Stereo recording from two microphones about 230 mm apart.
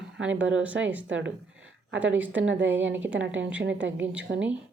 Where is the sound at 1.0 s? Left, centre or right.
Right.